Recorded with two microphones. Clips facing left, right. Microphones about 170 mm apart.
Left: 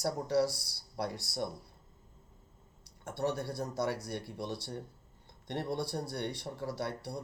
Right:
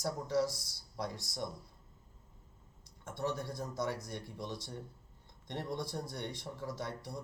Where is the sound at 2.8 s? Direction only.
70° left (ahead or behind).